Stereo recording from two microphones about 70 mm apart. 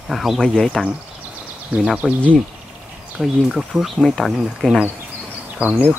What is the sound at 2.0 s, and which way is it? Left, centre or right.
Speech, centre.